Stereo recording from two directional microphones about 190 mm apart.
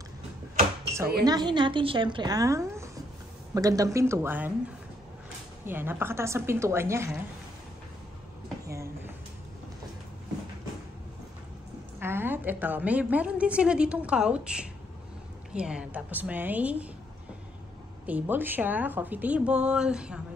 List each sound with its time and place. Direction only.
1.2 s a woman's voice: 20° right (ahead or behind)
5.7 s a woman's voice: 10° right (ahead or behind)
8.6 s a sound: 15° right (ahead or behind)
12.0 s a woman's voice: 10° right (ahead or behind)
18.0 s a woman's voice: 10° right (ahead or behind)